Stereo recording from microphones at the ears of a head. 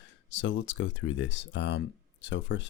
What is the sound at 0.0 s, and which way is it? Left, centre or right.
Speech, left.